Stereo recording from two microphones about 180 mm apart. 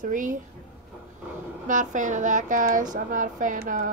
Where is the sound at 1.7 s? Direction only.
45° right (ahead or behind).